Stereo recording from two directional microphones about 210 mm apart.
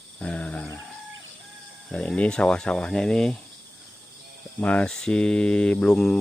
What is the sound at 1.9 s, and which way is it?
Speech, 5° left (ahead or behind).